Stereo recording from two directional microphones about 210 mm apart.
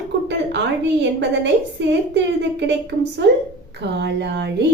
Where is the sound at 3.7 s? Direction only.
55° right (ahead or behind).